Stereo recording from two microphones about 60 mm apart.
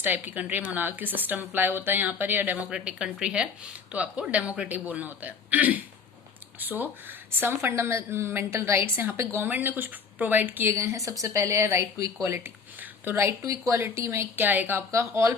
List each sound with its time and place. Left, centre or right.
0.0 s speech: right
2.6 s a man's voice: centre; by 8.8 s right
9.4 s speech: right
10.7 s a woman's voice: right
12.4 s a sound: right
13.4 s speech: right
13.7 s speech: right
14.9 s a woman's voice: right